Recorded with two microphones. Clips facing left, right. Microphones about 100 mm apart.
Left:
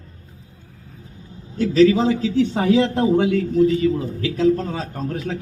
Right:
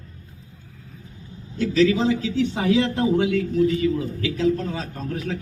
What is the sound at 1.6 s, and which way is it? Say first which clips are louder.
A man's voice: left 4 dB; 40° left (ahead or behind).